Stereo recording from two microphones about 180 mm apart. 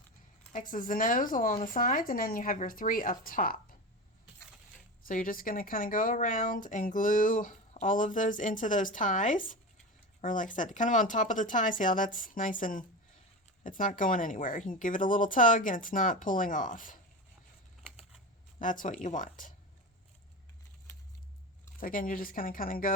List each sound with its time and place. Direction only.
0.7 s speech: 50° left (ahead or behind)
5.0 s speech: 50° left (ahead or behind)
18.6 s speech: 45° left (ahead or behind)
21.8 s speech: 50° left (ahead or behind)